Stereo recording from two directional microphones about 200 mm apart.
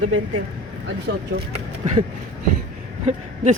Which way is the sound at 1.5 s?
35° right (ahead or behind).